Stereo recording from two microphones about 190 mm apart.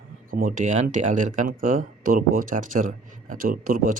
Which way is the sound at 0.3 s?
45° right (ahead or behind).